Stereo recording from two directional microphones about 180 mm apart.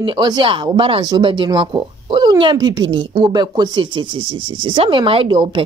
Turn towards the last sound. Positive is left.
turn(degrees=-25)  # may be behind; listen again after turning